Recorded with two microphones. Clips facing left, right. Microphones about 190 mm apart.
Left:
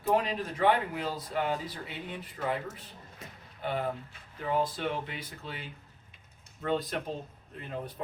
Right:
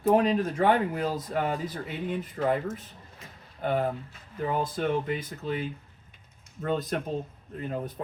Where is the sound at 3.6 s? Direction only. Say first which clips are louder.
Right 5 dB; 50° right (ahead or behind).